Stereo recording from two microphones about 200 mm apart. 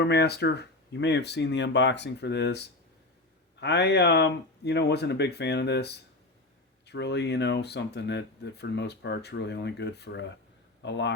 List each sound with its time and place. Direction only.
0.0 s speech: 55° left (ahead or behind)